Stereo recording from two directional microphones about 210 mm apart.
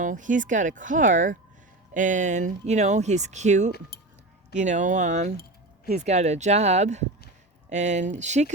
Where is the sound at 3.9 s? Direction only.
45° left (ahead or behind).